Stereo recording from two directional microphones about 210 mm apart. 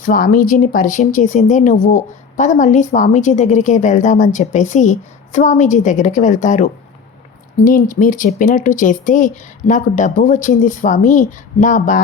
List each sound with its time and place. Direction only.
0.0 s speech: 40° left (ahead or behind)